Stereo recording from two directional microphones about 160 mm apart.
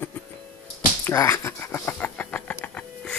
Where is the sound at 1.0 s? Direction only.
20° left (ahead or behind).